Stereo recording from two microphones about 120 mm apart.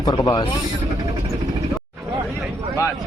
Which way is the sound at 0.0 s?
35° left (ahead or behind).